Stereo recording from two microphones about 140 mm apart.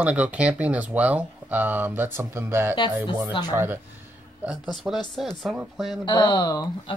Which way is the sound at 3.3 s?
30° left (ahead or behind).